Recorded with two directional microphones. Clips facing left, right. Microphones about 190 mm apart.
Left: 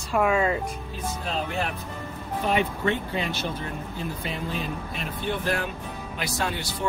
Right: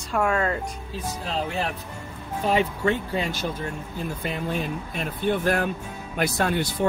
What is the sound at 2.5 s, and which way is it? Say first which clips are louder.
Speech: right 2 dB; 40° right (ahead or behind).